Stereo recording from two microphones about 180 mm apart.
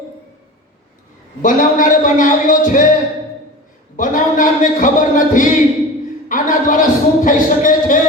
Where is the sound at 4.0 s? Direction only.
45° left (ahead or behind).